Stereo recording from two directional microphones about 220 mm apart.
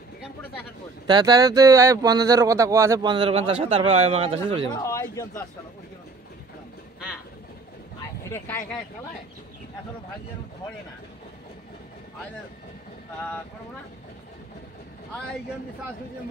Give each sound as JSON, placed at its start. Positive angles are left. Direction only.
{"t": 1.0, "sound": "speech", "side_deg": -20}
{"t": 4.7, "sound": "speech", "side_deg": 15}
{"t": 8.2, "sound": "speech", "side_deg": 10}